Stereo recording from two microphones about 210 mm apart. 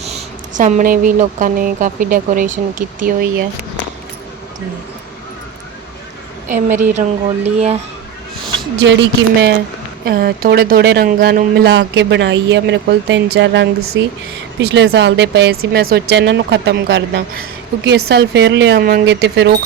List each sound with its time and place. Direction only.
0.0 s speech: 35° right (ahead or behind)
6.5 s speech: 35° right (ahead or behind)
8.8 s speech: 55° right (ahead or behind)